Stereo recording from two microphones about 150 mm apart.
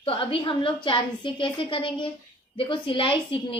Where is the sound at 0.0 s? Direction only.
35° left (ahead or behind).